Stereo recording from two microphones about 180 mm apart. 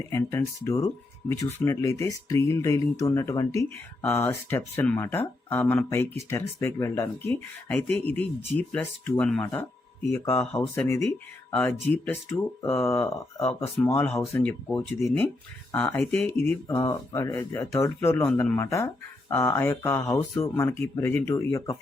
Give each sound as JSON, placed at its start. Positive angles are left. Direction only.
{"t": 0.1, "sound": "speech", "side_deg": 15}